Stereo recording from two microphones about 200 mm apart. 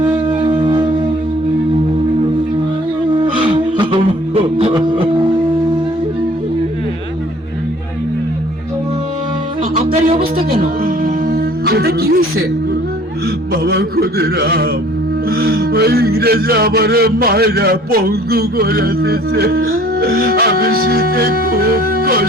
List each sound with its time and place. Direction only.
0.3 s music: 25° right (ahead or behind)
3.3 s music: 25° right (ahead or behind)
9.7 s music: 30° right (ahead or behind)
10.3 s music: 45° right (ahead or behind)
13.5 s a sound: 55° right (ahead or behind)
15.3 s music: 50° right (ahead or behind)